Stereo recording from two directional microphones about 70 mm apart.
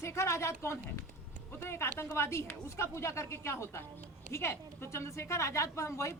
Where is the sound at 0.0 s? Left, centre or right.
Left.